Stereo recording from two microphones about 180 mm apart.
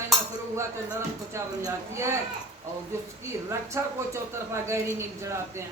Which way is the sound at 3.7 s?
15° right (ahead or behind).